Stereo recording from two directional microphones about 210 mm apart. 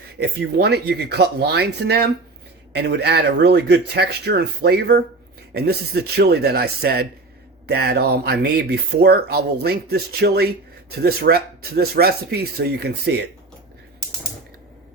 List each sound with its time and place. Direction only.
0.2 s speech: 50° right (ahead or behind)